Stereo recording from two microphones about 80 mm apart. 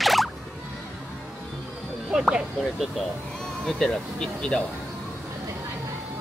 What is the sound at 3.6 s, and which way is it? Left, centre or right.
Speech, centre.